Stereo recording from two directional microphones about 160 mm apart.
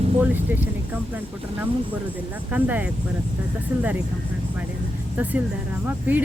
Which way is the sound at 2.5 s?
10° right (ahead or behind).